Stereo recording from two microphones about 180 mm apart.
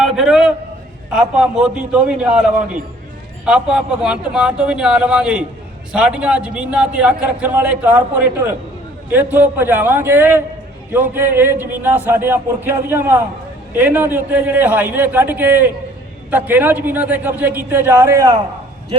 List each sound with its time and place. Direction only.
0.2 s a man's voice: 5° right (ahead or behind)